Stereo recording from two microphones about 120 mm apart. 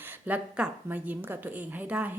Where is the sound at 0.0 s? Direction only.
15° right (ahead or behind).